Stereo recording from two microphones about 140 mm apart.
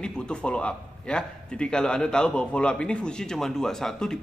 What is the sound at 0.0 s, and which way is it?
A man's voice, 5° left (ahead or behind).